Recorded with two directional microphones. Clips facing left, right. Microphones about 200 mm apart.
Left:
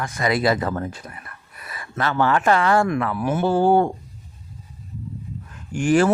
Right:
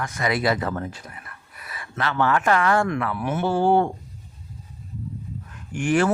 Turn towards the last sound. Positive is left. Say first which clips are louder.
# left 3 dB
turn(degrees=35)  # may be behind; listen again after turning